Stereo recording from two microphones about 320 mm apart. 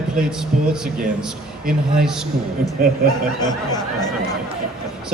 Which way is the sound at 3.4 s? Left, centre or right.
Centre.